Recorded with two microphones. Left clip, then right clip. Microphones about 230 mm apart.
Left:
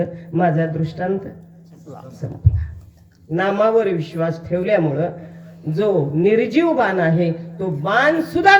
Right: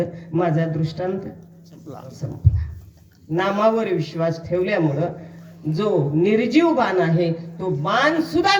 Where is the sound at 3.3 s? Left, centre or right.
Right.